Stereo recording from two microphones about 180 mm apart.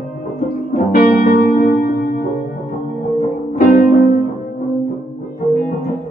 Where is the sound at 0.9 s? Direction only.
50° left (ahead or behind).